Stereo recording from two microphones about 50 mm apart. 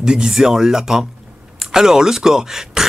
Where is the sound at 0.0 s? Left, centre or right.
Centre.